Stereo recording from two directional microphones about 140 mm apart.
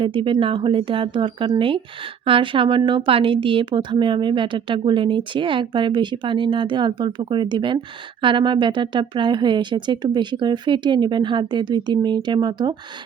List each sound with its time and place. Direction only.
0.0 s a woman's voice: 35° right (ahead or behind)